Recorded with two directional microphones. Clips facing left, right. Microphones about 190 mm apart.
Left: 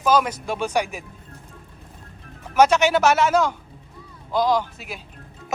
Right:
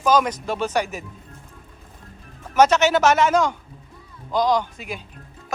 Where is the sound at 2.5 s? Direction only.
10° left (ahead or behind).